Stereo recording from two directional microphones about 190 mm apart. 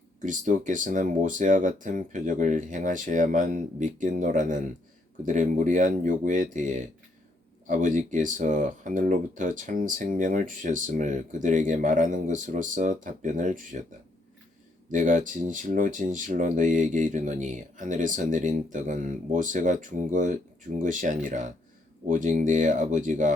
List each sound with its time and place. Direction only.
0.2 s speech: 40° right (ahead or behind)
14.9 s speech: 40° right (ahead or behind)